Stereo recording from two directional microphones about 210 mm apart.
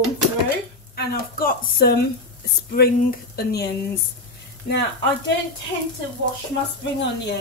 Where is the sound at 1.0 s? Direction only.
45° left (ahead or behind).